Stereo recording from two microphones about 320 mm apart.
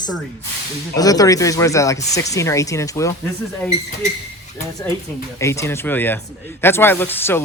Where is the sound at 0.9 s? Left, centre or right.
Centre.